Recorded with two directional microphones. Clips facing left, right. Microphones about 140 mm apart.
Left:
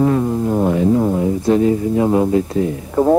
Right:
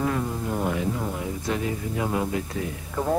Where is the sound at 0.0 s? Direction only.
35° left (ahead or behind).